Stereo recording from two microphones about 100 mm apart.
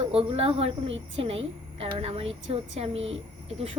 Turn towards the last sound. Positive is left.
turn(degrees=-85)